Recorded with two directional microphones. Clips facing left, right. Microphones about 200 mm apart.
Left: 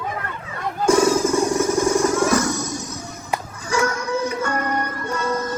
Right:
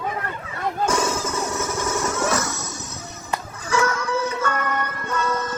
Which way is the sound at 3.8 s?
25° left (ahead or behind).